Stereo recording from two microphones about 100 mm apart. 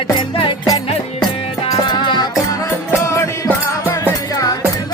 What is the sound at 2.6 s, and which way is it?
Music, 30° left (ahead or behind).